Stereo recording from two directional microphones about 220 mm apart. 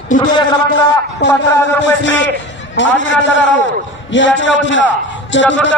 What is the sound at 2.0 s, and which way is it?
A man's voice, 55° left (ahead or behind).